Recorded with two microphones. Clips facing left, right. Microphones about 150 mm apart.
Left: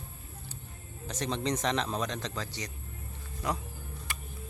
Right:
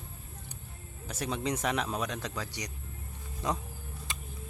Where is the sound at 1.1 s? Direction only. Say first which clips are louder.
Left 1 dB; 5° right (ahead or behind).